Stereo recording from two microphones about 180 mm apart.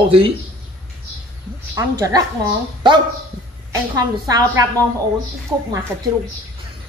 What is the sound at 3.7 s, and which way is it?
A man's voice, 20° right (ahead or behind).